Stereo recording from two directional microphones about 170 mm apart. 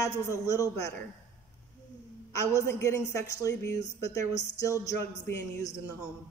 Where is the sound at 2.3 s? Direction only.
15° left (ahead or behind).